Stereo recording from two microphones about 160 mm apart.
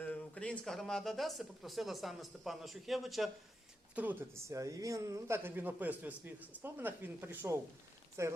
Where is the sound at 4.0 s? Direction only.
10° right (ahead or behind).